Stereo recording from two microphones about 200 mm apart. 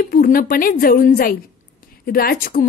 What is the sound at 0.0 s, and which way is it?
A woman's voice, 50° left (ahead or behind).